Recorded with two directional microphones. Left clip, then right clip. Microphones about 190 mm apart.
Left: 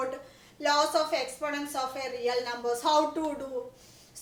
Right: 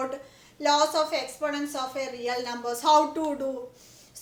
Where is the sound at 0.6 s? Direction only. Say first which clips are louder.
Right 3 dB; 30° right (ahead or behind).